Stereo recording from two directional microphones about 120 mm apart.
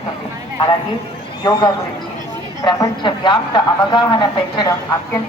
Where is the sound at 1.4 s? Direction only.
35° left (ahead or behind).